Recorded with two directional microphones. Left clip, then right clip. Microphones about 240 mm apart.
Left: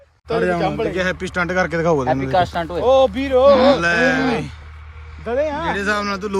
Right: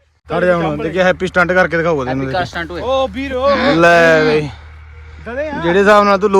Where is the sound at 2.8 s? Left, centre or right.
Left.